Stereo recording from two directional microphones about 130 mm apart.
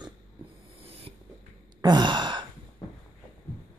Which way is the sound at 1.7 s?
35° right (ahead or behind).